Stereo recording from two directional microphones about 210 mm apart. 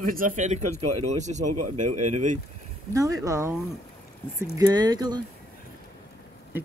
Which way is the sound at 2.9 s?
15° right (ahead or behind).